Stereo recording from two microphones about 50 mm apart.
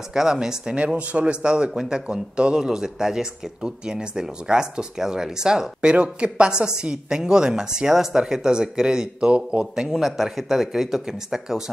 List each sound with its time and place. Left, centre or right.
0.1 s speech: centre
0.7 s speech: right
9.8 s speech: centre